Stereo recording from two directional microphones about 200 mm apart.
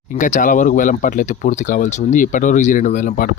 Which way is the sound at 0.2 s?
40° left (ahead or behind).